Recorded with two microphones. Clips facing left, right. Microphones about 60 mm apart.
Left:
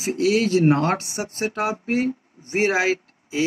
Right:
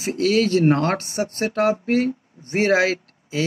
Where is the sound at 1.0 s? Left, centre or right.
Right.